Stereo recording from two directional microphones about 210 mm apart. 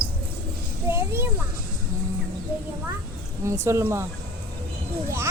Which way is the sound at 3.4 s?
15° right (ahead or behind).